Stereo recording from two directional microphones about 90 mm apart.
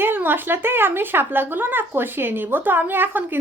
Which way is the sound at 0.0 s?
25° right (ahead or behind).